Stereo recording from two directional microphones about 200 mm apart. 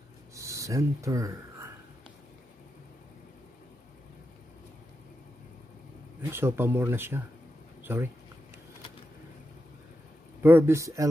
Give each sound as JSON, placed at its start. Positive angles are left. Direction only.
{"t": 0.3, "sound": "a sound", "side_deg": -15}
{"t": 6.3, "sound": "speech", "side_deg": -10}
{"t": 10.4, "sound": "speech", "side_deg": -10}